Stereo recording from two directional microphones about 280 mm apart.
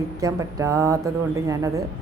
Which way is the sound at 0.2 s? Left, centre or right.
Centre.